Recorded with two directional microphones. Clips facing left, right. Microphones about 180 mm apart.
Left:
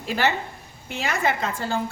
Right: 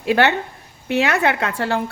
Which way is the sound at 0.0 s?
65° right (ahead or behind).